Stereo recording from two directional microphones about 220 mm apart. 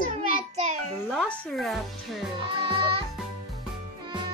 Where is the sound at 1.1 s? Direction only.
Centre (ahead or behind).